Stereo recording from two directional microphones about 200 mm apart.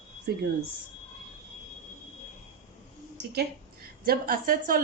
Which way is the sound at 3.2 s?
50° right (ahead or behind).